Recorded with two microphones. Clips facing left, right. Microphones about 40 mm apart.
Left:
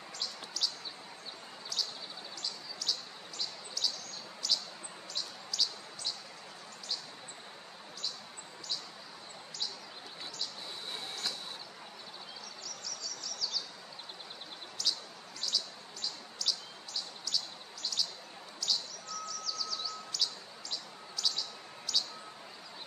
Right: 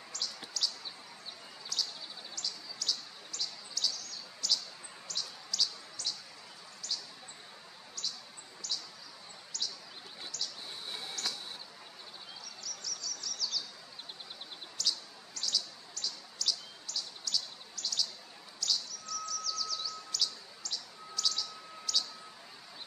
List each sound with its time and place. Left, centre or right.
0.1 s chirp: centre
1.7 s a sound: centre
2.3 s chirp: centre
4.4 s bird: centre
11.2 s a sound: centre
12.6 s bird: centre
14.8 s bird: centre
18.6 s chirp: centre